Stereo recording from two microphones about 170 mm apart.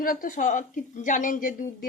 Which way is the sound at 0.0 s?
55° left (ahead or behind).